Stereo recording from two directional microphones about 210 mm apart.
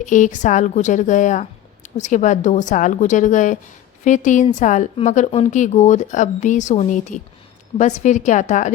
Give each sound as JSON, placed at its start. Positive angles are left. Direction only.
{"t": 0.0, "sound": "speech", "side_deg": 35}